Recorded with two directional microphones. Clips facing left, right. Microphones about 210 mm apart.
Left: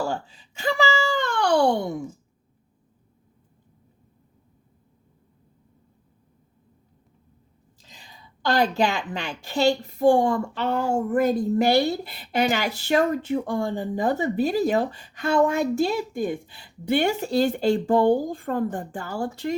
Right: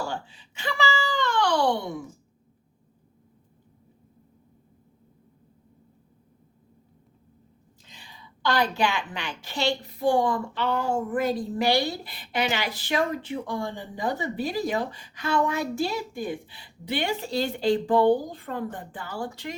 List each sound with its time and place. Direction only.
0.1 s wail: 40° left (ahead or behind)
7.9 s a woman's voice: 40° left (ahead or behind)